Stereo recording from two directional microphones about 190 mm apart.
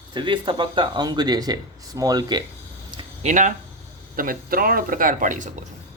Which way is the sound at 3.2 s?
40° right (ahead or behind).